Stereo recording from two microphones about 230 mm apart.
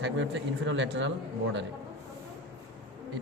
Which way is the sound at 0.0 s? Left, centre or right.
Right.